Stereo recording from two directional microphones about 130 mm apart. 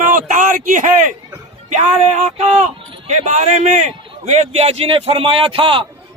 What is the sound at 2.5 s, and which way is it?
A man's voice, 60° right (ahead or behind).